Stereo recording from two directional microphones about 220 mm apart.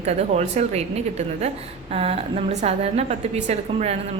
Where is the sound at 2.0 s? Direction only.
30° right (ahead or behind).